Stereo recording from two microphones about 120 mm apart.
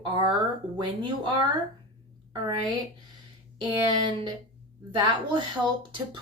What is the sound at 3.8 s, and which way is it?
Speech, 40° right (ahead or behind).